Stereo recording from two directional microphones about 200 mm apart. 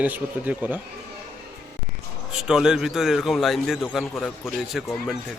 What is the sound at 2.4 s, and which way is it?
A man's voice, 5° right (ahead or behind).